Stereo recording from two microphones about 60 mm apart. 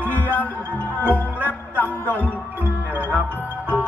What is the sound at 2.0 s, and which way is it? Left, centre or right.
Music, right.